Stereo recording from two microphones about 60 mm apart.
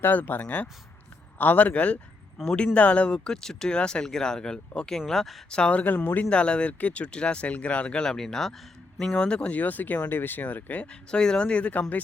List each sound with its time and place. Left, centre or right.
0.0 s speech: left
2.4 s a man's voice: centre
2.7 s speech: left
3.2 s speech: centre
5.5 s speech: centre
5.8 s speech: left
6.2 s speech: centre
8.0 s speech: centre; by 10.8 s left
11.1 s speech: centre